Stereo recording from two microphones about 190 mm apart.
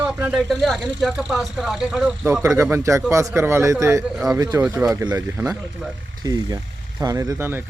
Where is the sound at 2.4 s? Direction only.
15° right (ahead or behind).